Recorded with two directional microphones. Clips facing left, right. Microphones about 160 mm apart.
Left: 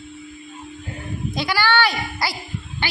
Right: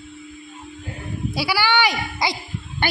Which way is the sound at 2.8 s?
50° right (ahead or behind).